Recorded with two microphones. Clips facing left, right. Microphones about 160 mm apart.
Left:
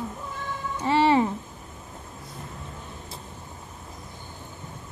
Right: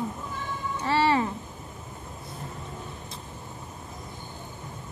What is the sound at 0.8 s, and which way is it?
Speech, 15° left (ahead or behind).